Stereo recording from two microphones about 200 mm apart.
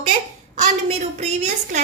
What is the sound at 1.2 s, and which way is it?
Speech, 35° right (ahead or behind).